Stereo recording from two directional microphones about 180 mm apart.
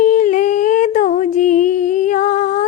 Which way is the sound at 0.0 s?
45° left (ahead or behind).